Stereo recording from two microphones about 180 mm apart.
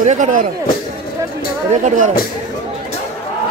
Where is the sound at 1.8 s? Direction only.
45° right (ahead or behind).